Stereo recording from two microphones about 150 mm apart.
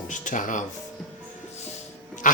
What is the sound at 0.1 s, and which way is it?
Speech, 60° left (ahead or behind).